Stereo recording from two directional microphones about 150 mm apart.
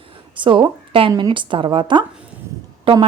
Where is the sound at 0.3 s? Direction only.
35° right (ahead or behind).